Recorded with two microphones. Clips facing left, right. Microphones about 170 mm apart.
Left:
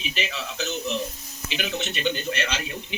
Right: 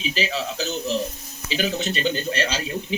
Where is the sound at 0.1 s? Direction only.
35° right (ahead or behind).